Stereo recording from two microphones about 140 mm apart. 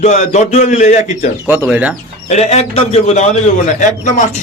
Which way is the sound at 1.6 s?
10° right (ahead or behind).